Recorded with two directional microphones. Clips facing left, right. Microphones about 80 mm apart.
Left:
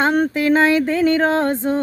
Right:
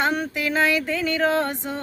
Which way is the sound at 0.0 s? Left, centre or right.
Left.